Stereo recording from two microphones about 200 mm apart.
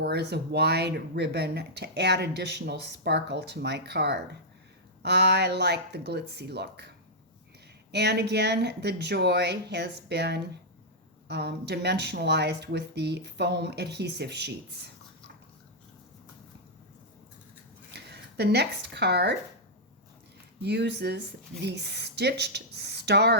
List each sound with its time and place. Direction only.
0.0 s speech: 55° right (ahead or behind)
17.9 s speech: 55° right (ahead or behind)
20.6 s speech: 55° right (ahead or behind)